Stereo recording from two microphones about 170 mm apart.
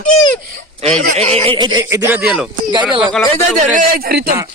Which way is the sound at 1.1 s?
35° right (ahead or behind).